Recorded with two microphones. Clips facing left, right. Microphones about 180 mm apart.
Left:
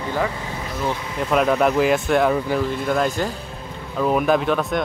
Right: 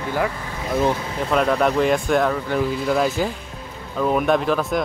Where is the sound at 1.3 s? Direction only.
5° left (ahead or behind).